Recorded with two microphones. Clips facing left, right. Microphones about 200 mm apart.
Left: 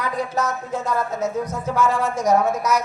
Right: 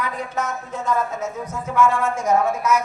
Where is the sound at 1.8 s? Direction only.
40° left (ahead or behind).